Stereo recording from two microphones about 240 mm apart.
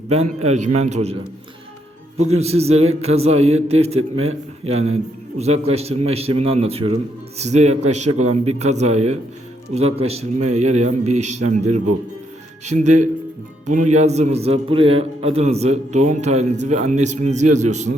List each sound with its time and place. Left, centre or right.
0.1 s a man's voice: right